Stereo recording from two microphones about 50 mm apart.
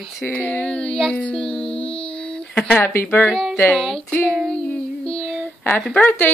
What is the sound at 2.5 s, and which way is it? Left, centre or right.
Speech, left.